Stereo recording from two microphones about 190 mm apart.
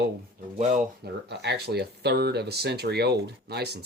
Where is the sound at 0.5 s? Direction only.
35° right (ahead or behind).